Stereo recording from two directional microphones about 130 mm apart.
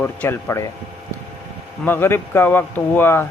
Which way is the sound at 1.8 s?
15° left (ahead or behind).